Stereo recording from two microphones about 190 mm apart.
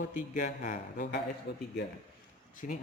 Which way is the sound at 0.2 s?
40° left (ahead or behind).